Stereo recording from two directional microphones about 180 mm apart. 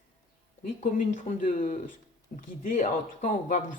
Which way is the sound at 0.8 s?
50° left (ahead or behind).